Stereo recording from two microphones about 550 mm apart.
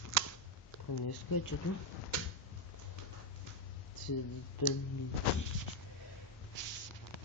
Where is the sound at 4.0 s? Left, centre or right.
Left.